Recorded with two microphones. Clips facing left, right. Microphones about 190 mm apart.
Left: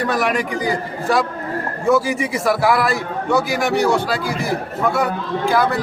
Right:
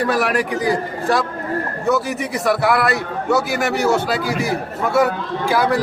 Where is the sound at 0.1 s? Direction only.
5° right (ahead or behind).